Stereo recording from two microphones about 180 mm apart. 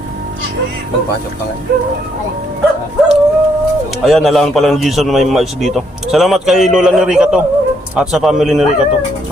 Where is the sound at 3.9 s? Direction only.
Centre (ahead or behind).